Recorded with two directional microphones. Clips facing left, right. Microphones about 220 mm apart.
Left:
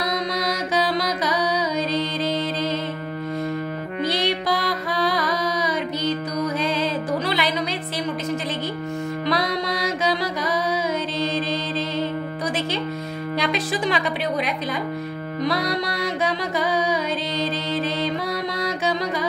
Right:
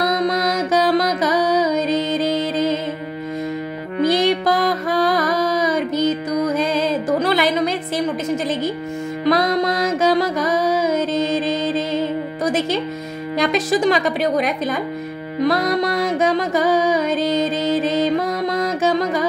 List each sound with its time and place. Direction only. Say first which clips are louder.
0.0 s music: right 6 dB; 50° right (ahead or behind)
4.0 s music: right 8 dB; 45° right (ahead or behind)
9.2 s music: right 9 dB; 45° right (ahead or behind)
13.4 s a woman's voice: right 7 dB; 45° right (ahead or behind)
15.4 s music: right 6 dB; 50° right (ahead or behind)